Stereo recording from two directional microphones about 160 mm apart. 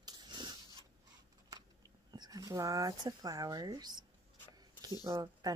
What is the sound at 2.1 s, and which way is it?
Speech, 25° right (ahead or behind).